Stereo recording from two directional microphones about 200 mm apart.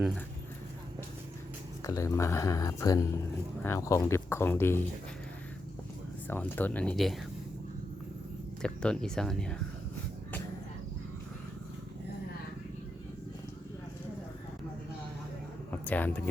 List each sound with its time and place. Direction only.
1.8 s speech: 15° left (ahead or behind)
6.2 s speech: 10° left (ahead or behind)
8.6 s speech: 5° left (ahead or behind)
15.7 s speech: 10° left (ahead or behind)